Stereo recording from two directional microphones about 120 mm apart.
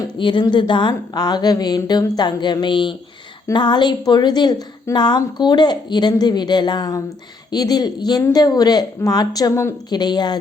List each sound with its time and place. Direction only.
0.2 s a woman's voice: 45° left (ahead or behind)